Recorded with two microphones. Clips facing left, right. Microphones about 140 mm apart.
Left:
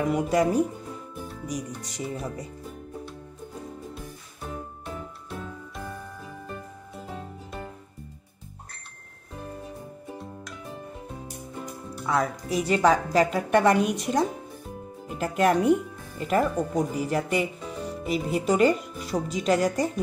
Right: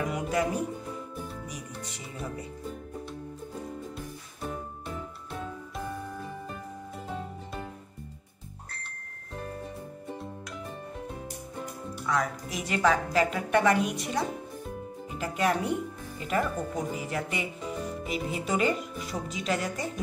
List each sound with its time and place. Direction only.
0.1 s a woman's voice: 40° left (ahead or behind)
1.8 s a woman's voice: 40° left (ahead or behind)
12.1 s a woman's voice: 35° left (ahead or behind)